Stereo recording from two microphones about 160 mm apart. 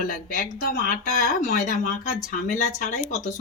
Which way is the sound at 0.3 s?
60° left (ahead or behind).